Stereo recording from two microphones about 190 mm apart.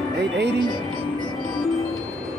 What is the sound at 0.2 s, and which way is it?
Speech, 60° right (ahead or behind).